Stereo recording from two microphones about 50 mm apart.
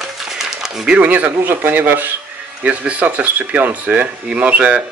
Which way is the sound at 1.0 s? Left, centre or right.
Right.